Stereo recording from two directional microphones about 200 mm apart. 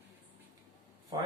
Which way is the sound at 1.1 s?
20° right (ahead or behind).